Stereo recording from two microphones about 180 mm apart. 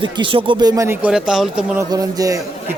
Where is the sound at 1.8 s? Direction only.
20° right (ahead or behind).